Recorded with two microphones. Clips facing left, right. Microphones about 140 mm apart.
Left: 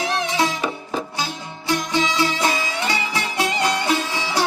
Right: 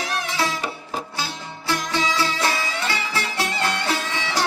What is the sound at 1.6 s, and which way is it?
Music, 15° left (ahead or behind).